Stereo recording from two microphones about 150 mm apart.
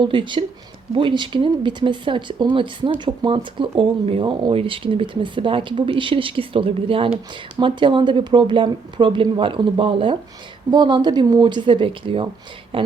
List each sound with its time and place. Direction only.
0.0 s speech: 30° right (ahead or behind)